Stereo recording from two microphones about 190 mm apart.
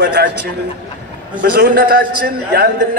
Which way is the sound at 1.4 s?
55° right (ahead or behind).